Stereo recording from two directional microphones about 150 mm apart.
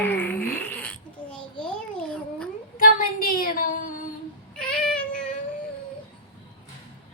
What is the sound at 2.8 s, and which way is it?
A woman's voice, 70° left (ahead or behind).